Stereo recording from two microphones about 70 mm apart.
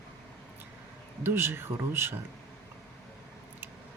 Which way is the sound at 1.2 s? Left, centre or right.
Right.